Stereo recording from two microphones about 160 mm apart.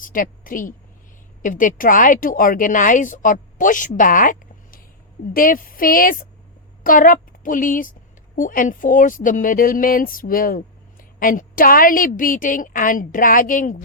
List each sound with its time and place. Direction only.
0.0 s speech: 60° left (ahead or behind)